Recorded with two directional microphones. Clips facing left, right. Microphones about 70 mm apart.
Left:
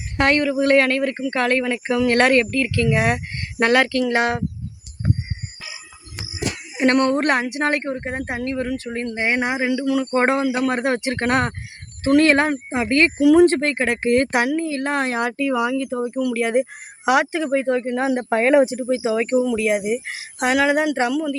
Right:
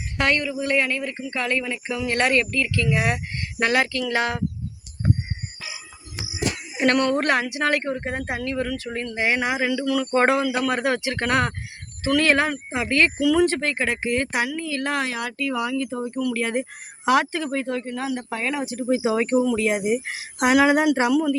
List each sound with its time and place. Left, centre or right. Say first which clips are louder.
0.2 s speech: left 5 dB; left
6.7 s speech: left 3 dB; left
9.6 s speech: left 3 dB; left
13.1 s speech: left 10 dB; left
13.4 s speech: left 5 dB; left
15.4 s speech: left 1 dB; centre
17.9 s speech: left 8 dB; left
18.6 s speech: left 8 dB; centre
18.9 s speech: left 1 dB; centre